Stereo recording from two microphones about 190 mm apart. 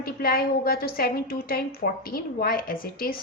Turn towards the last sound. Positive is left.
turn(degrees=50)  # may be behind; listen again after turning